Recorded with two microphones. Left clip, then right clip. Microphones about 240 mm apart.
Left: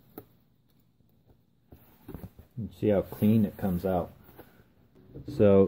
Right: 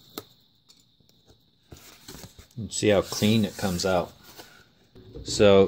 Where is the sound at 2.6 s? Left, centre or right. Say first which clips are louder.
Right 5 dB; centre.